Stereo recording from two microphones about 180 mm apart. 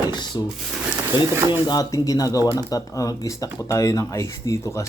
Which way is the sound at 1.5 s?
20° left (ahead or behind).